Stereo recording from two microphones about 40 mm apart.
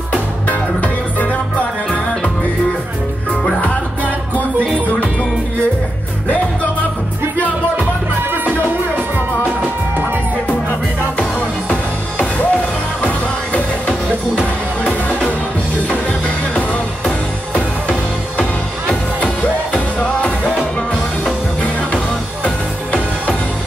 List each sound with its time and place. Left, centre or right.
6.2 s music: left
11.7 s music: left
19.7 s music: left